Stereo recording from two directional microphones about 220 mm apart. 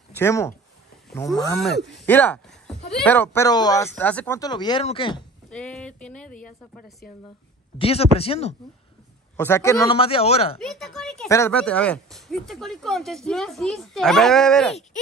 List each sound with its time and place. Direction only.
0.1 s speech: 10° left (ahead or behind)
2.0 s speech: 10° left (ahead or behind)
4.4 s speech: 20° left (ahead or behind)
5.5 s speech: 5° left (ahead or behind)
7.8 s speech: 25° left (ahead or behind)
9.4 s speech: 10° left (ahead or behind); by 10.6 s 25° left (ahead or behind)
10.6 s speech: centre (ahead or behind)